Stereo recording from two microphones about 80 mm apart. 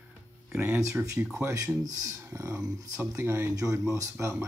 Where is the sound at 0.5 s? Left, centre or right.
Right.